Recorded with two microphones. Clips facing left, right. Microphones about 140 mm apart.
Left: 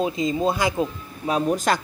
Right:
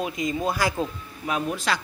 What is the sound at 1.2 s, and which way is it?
Speech, 35° left (ahead or behind).